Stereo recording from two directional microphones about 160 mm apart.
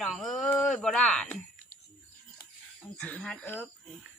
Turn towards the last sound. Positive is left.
turn(degrees=10)  # may be behind; listen again after turning